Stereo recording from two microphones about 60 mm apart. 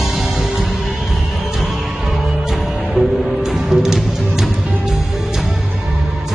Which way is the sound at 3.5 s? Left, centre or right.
Centre.